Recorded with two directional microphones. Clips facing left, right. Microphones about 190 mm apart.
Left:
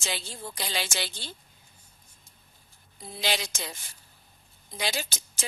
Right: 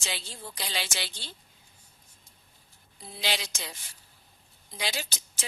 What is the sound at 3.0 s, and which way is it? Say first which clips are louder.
A woman's voice: left 3 dB; 45° left (ahead or behind).